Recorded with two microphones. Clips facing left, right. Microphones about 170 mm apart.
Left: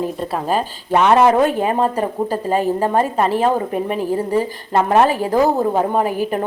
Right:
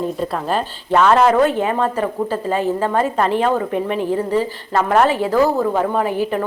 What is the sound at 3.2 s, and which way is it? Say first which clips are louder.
Speech: even; 5° left (ahead or behind).